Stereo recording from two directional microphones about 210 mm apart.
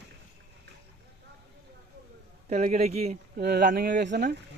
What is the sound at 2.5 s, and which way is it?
Speech, 30° right (ahead or behind).